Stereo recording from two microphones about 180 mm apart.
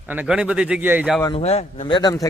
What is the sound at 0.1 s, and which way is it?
A man's voice, 5° right (ahead or behind).